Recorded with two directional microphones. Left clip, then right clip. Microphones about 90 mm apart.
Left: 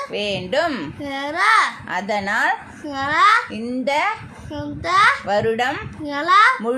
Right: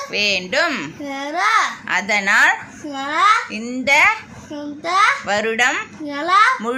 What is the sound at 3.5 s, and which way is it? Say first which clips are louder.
Speech: right 5 dB; 45° left (ahead or behind).